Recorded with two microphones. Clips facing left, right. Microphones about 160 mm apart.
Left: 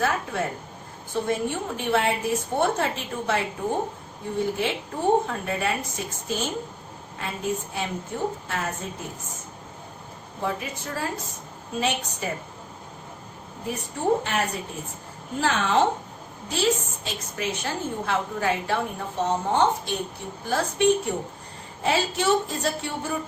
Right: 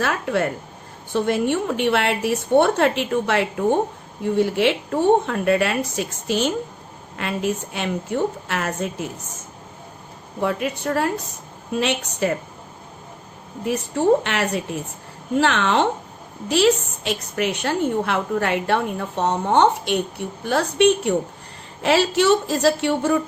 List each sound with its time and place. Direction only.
0.0 s a woman's voice: 75° right (ahead or behind)
10.4 s a woman's voice: 70° right (ahead or behind)
13.7 s a woman's voice: 75° right (ahead or behind)